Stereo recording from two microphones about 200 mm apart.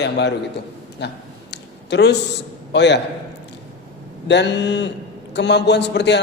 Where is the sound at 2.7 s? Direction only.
60° left (ahead or behind).